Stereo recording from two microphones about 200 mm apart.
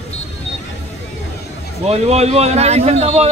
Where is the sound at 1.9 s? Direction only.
30° right (ahead or behind).